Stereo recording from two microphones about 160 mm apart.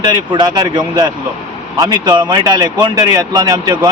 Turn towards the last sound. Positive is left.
turn(degrees=-25)  # may be behind; listen again after turning